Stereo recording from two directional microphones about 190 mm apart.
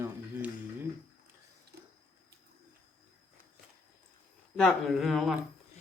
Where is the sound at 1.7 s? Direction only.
60° right (ahead or behind).